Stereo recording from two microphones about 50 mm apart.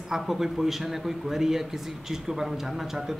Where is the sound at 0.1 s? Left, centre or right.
Centre.